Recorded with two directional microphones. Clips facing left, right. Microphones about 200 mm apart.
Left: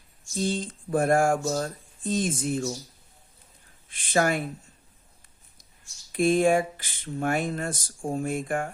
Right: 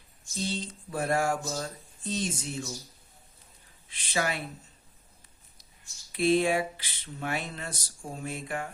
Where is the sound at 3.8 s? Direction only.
50° left (ahead or behind).